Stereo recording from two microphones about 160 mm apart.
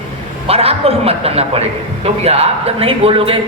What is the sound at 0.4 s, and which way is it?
A man's voice, 40° right (ahead or behind).